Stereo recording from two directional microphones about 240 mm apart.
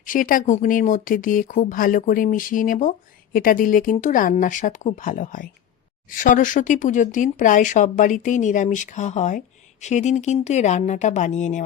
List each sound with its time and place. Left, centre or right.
0.0 s speech: left